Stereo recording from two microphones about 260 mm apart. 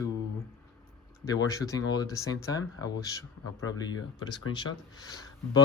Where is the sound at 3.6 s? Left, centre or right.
Left.